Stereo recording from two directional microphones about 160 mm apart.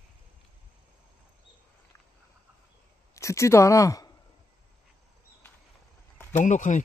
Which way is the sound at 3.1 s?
20° left (ahead or behind).